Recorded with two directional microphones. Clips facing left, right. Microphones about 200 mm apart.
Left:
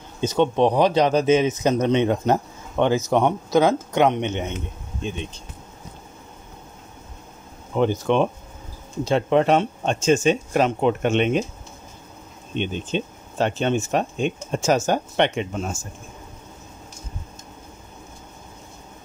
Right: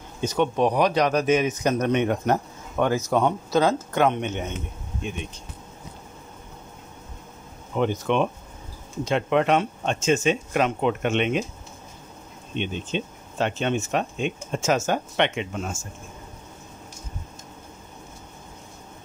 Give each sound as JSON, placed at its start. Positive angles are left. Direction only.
{"t": 0.2, "sound": "speech", "side_deg": 25}
{"t": 7.7, "sound": "speech", "side_deg": 35}
{"t": 12.5, "sound": "speech", "side_deg": 40}